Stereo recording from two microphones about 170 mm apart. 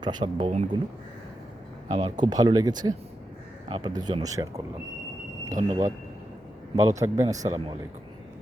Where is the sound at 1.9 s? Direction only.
25° right (ahead or behind).